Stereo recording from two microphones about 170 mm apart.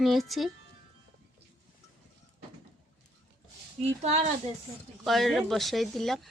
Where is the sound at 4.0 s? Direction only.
40° right (ahead or behind).